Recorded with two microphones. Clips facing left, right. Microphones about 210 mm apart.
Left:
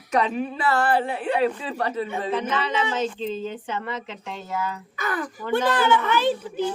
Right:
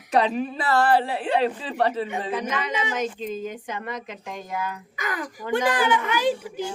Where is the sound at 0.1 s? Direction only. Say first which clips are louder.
Right 1 dB; 35° right (ahead or behind).